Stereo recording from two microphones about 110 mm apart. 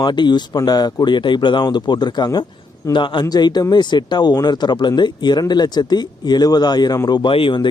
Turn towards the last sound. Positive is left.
turn(degrees=50)  # may be behind; listen again after turning